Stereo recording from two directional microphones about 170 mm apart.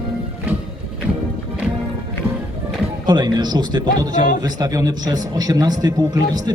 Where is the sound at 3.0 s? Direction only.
25° right (ahead or behind).